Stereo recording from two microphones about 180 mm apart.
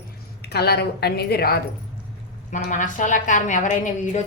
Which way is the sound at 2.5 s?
45° left (ahead or behind).